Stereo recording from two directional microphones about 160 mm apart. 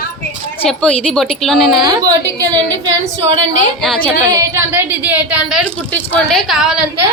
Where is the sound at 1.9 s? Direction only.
25° right (ahead or behind).